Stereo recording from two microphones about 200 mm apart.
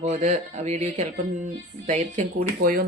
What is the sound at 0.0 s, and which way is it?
A woman's voice, 35° right (ahead or behind).